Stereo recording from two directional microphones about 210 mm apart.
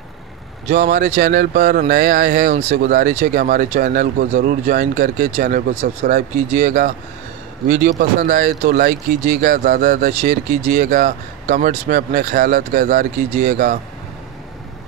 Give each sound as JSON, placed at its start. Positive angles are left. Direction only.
{"t": 0.7, "sound": "speech", "side_deg": -45}
{"t": 2.7, "sound": "speech", "side_deg": -50}